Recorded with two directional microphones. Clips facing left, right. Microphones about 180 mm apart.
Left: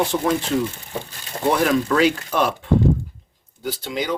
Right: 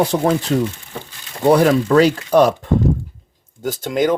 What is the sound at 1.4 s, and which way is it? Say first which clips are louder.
Speech: right 6 dB; 35° right (ahead or behind).